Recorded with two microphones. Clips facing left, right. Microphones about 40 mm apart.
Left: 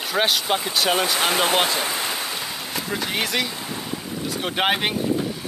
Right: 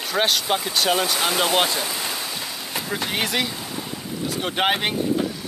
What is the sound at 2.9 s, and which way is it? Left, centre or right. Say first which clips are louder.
Speech: even; centre.